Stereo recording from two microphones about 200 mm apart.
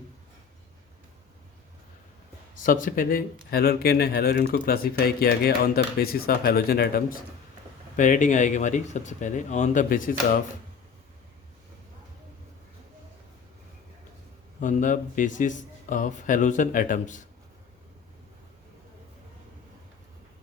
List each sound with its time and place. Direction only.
2.6 s speech: 45° left (ahead or behind)
7.9 s a man's voice: 40° left (ahead or behind)
14.6 s a man's voice: 40° left (ahead or behind)